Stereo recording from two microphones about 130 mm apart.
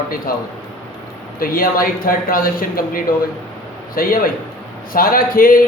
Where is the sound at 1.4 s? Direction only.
90° left.